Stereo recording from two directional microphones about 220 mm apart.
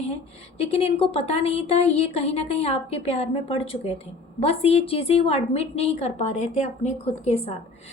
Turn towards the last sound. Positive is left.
turn(degrees=30)  # may be behind; listen again after turning